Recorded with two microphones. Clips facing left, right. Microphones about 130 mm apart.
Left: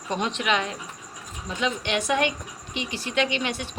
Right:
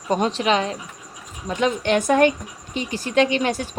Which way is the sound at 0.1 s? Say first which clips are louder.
Right 6 dB; 40° right (ahead or behind).